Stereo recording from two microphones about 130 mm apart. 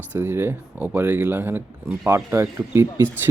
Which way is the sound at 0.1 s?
15° right (ahead or behind).